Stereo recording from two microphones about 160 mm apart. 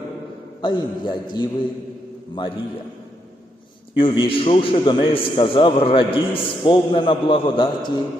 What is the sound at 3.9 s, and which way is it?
A man's voice, 30° left (ahead or behind).